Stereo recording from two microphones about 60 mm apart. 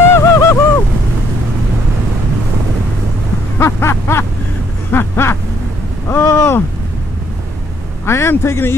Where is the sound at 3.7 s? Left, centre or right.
Left.